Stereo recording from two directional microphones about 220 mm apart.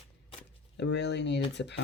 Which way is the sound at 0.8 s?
50° left (ahead or behind).